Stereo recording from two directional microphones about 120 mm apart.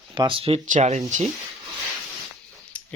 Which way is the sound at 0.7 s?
75° right (ahead or behind).